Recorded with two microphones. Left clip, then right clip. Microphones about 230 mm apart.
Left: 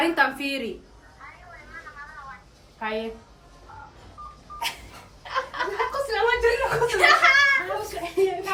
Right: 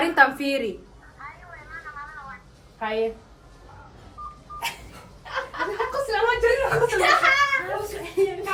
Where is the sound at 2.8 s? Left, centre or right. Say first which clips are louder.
Right 2 dB; centre.